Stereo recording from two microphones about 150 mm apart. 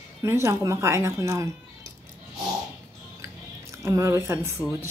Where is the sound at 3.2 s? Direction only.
20° right (ahead or behind).